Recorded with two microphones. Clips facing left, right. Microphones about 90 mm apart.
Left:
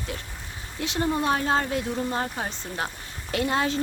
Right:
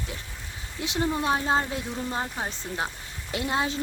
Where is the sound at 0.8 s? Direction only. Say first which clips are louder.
Left 2 dB; 15° right (ahead or behind).